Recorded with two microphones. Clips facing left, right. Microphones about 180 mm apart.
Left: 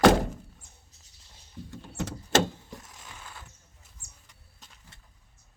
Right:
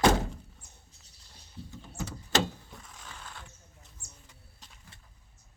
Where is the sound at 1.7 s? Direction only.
65° left (ahead or behind).